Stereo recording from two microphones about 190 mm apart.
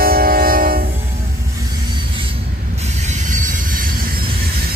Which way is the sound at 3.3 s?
45° right (ahead or behind).